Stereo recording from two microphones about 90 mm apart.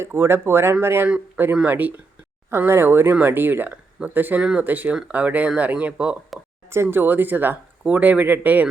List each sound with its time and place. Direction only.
0.0 s speech: 30° right (ahead or behind)